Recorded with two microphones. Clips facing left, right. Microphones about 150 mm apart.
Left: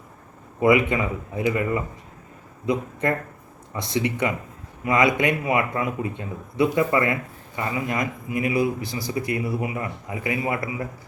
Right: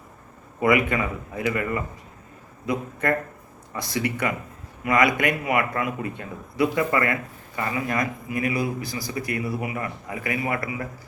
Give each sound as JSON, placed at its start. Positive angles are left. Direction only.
{"t": 0.6, "sound": "speech", "side_deg": 25}